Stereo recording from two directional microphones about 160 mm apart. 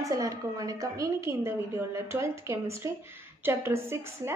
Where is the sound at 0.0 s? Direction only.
20° right (ahead or behind).